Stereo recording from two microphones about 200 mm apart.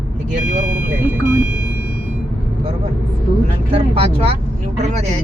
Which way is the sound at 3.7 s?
30° right (ahead or behind).